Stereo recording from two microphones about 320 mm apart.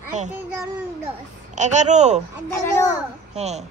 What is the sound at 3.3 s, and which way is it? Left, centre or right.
Speech, right.